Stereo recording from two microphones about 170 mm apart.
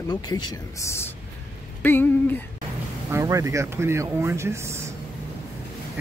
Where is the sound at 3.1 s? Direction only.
20° right (ahead or behind).